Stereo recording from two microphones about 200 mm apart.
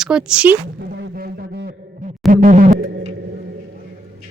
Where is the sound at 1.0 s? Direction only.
50° right (ahead or behind).